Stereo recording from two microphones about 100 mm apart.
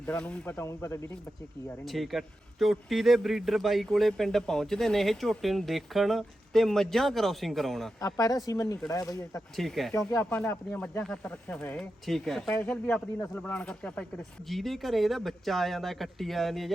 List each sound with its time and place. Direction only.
0.0 s speech: 10° left (ahead or behind)
0.5 s speech: 30° left (ahead or behind)
1.8 s speech: centre (ahead or behind)
8.0 s speech: 35° left (ahead or behind)
9.6 s speech: centre (ahead or behind)
9.9 s speech: 30° left (ahead or behind)
10.2 s speech: 15° left (ahead or behind)
12.0 s speech: centre (ahead or behind)
12.6 s speech: 15° left (ahead or behind)
14.5 s speech: centre (ahead or behind)